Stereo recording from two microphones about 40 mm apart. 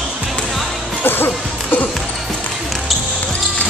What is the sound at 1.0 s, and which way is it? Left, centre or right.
Music, left.